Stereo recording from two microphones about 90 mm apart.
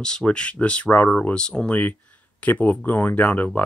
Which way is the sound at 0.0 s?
10° left (ahead or behind).